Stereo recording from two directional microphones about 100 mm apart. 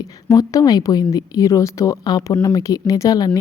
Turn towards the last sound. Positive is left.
turn(degrees=40)  # may be behind; listen again after turning